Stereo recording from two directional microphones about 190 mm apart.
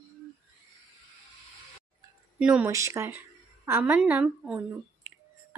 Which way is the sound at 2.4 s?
5° right (ahead or behind).